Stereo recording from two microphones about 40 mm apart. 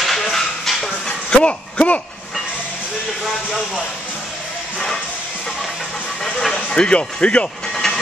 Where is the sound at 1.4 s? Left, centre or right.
Left.